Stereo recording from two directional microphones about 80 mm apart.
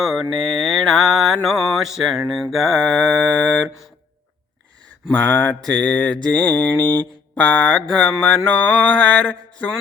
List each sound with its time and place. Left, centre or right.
0.0 s mantra: centre
5.1 s mantra: left